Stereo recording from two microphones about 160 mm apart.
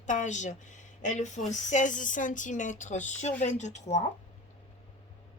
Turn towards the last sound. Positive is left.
turn(degrees=45)  # may be behind; listen again after turning